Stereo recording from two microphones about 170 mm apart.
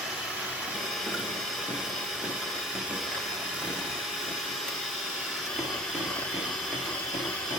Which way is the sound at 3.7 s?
Centre (ahead or behind).